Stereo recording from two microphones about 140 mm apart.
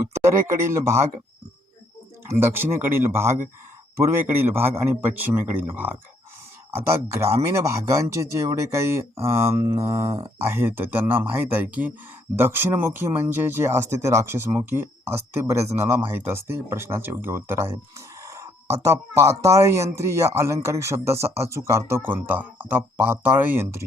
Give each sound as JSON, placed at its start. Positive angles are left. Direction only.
{"t": 0.1, "sound": "speech", "side_deg": -20}
{"t": 2.2, "sound": "speech", "side_deg": -15}